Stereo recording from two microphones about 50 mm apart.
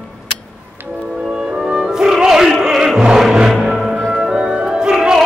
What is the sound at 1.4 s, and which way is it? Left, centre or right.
Music, centre.